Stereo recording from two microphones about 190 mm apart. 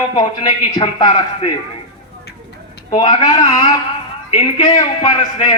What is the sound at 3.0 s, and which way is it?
A man's voice, 25° left (ahead or behind).